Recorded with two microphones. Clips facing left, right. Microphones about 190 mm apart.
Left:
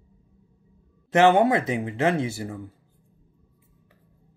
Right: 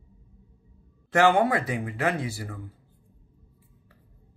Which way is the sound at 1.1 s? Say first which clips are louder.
Left 3 dB; 20° left (ahead or behind).